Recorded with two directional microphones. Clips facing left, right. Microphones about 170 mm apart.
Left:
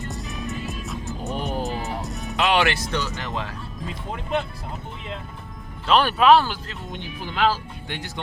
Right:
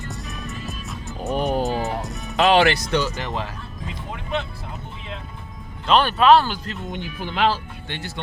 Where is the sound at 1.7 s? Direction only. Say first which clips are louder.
Right 5 dB; 40° right (ahead or behind).